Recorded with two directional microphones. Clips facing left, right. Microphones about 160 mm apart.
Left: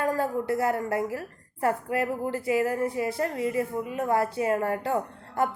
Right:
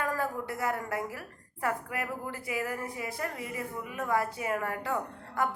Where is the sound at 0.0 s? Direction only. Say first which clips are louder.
Left 6 dB; 30° left (ahead or behind).